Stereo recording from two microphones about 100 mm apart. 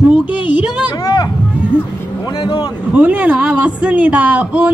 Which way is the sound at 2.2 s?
50° left (ahead or behind).